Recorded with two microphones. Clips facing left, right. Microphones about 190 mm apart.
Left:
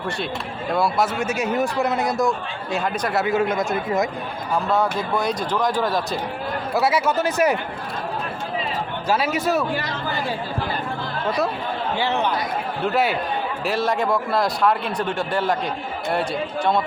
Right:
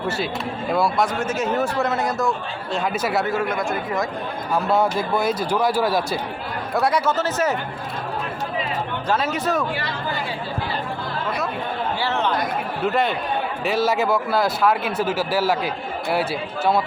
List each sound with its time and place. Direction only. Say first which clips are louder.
0.7 s a man's voice: even; centre (ahead or behind)
2.9 s speech: right 2 dB; 5° right (ahead or behind)
3.2 s speech: left 2 dB; 20° left (ahead or behind)
4.7 s speech: right 2 dB; 5° right (ahead or behind)
6.7 s a man's voice: even; 5° left (ahead or behind)
9.0 s a man's voice: left 2 dB; 10° left (ahead or behind)
11.9 s a man's voice: left 2 dB; 15° left (ahead or behind)
12.8 s speech: even; 5° left (ahead or behind)